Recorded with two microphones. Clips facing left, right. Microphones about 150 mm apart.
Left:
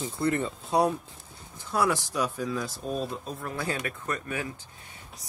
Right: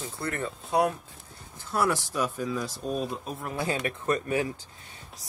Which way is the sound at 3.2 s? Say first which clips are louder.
Right 1 dB; 20° right (ahead or behind).